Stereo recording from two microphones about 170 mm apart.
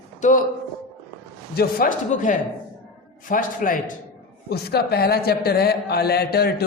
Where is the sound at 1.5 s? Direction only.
55° left (ahead or behind).